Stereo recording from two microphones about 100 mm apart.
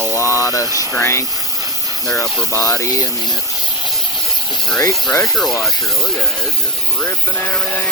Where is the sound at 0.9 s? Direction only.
30° left (ahead or behind).